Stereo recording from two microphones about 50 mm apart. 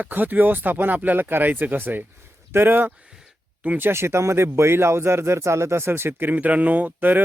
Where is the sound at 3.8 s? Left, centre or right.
Right.